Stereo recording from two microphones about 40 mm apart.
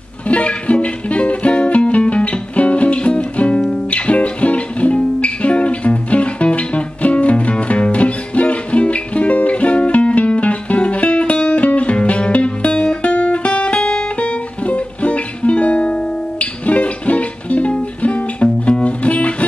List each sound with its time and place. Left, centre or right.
0.3 s music: left